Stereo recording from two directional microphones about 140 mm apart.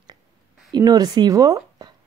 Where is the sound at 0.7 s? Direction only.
30° right (ahead or behind).